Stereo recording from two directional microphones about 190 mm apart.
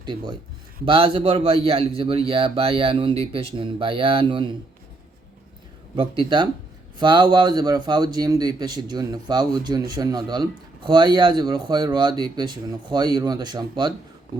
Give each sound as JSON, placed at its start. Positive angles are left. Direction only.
{"t": 0.0, "sound": "speech", "side_deg": -25}
{"t": 6.0, "sound": "speech", "side_deg": -25}